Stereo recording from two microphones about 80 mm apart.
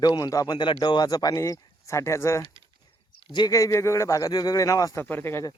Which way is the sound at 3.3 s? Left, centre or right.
Left.